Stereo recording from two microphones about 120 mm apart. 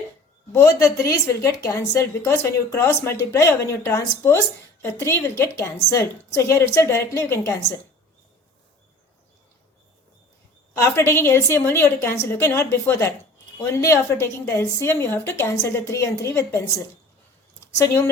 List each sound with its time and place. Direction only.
0.5 s a woman's voice: 25° left (ahead or behind)
10.9 s a woman's voice: 20° left (ahead or behind)